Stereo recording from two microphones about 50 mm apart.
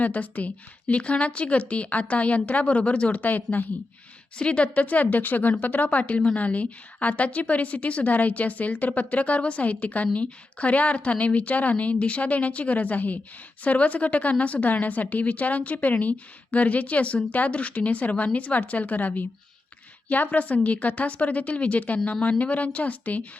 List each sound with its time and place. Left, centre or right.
0.0 s speech: left
4.4 s a woman's voice: left